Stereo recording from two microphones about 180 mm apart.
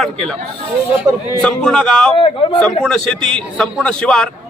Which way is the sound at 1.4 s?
5° left (ahead or behind).